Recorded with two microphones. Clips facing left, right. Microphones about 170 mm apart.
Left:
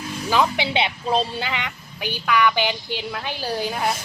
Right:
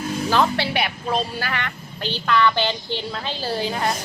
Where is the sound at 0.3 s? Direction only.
15° left (ahead or behind).